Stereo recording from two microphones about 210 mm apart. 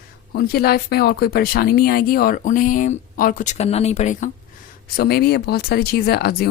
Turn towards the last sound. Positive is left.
turn(degrees=50)  # may be behind; listen again after turning